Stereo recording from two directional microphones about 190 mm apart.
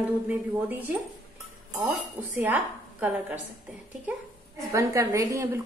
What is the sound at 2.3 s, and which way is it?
Speech, 10° right (ahead or behind).